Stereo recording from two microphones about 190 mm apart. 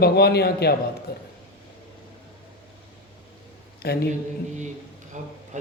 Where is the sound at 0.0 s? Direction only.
55° left (ahead or behind).